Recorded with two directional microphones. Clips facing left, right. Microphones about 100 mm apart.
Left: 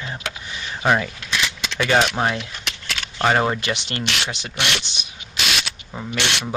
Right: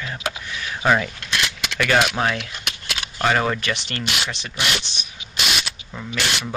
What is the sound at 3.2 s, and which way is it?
Speech, 25° left (ahead or behind).